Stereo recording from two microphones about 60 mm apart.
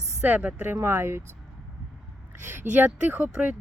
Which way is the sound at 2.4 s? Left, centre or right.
Right.